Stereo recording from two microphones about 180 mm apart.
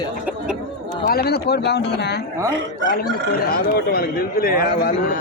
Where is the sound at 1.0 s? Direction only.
60° left (ahead or behind).